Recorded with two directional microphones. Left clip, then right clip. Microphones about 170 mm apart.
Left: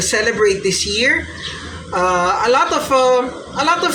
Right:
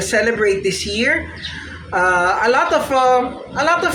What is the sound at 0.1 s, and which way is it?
A woman's voice, 15° right (ahead or behind).